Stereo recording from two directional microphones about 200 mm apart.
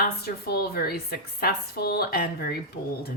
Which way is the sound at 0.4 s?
50° left (ahead or behind).